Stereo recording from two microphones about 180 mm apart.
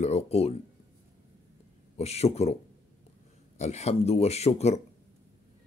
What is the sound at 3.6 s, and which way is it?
Speech, 40° left (ahead or behind).